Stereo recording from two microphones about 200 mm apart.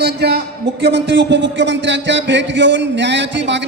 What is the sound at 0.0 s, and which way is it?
A man's voice, 55° right (ahead or behind).